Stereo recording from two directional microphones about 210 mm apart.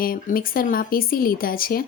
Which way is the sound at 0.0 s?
45° left (ahead or behind).